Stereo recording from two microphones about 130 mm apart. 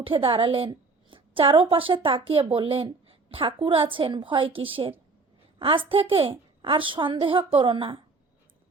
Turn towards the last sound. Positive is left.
turn(degrees=-40)  # may be behind; listen again after turning